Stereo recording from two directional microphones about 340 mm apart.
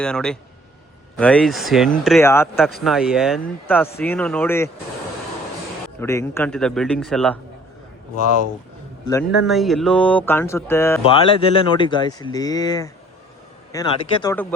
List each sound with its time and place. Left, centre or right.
0.0 s speech: centre
6.0 s speech: centre
8.1 s speech: left
9.5 s speech: centre